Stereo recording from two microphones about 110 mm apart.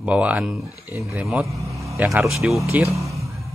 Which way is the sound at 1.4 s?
30° right (ahead or behind).